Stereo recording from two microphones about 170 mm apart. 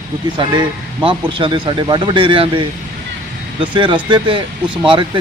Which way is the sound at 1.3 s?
30° right (ahead or behind).